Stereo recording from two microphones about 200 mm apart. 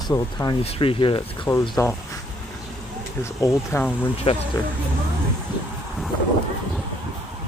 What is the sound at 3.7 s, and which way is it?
Speech, 15° left (ahead or behind).